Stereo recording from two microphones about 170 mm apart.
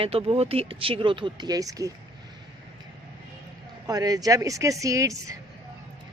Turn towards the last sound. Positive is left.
turn(degrees=-20)  # may be behind; listen again after turning